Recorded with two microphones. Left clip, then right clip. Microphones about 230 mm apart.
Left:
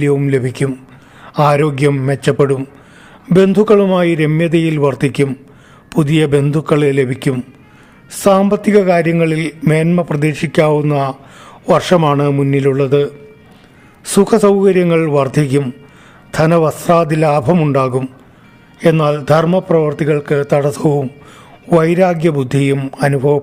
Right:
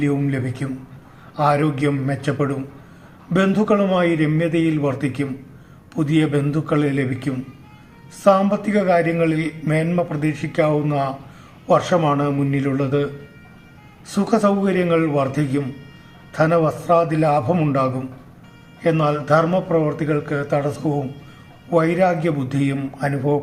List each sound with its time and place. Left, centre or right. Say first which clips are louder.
0.0 s a man's voice: left 8 dB; left